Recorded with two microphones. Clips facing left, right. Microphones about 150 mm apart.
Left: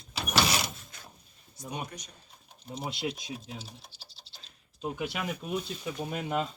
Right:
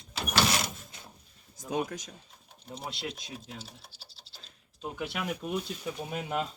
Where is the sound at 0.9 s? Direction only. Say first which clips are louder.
Even; 25° right (ahead or behind).